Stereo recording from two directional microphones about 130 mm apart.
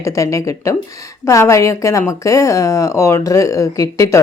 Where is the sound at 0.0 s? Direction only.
25° left (ahead or behind).